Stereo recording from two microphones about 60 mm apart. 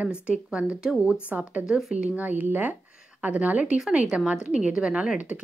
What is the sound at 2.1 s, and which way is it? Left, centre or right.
A woman's voice, right.